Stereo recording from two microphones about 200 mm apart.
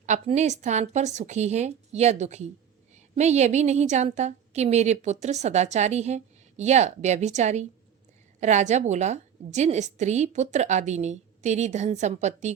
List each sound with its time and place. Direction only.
0.0 s a woman's voice: 35° right (ahead or behind)